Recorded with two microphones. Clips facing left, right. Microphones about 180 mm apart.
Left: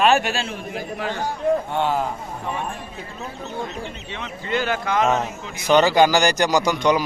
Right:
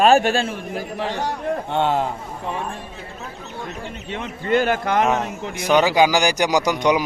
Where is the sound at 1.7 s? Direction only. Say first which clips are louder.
Right 2 dB; 25° right (ahead or behind).